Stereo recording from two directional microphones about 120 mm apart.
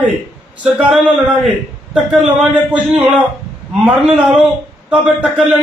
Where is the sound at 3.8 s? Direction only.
5° right (ahead or behind).